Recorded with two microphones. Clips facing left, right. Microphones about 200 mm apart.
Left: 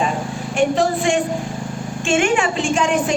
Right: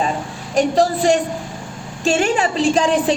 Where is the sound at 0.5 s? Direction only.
40° right (ahead or behind).